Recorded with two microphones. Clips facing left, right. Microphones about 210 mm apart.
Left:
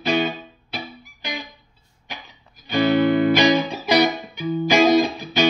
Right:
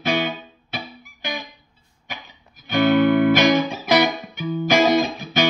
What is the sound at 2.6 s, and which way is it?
Music, 55° right (ahead or behind).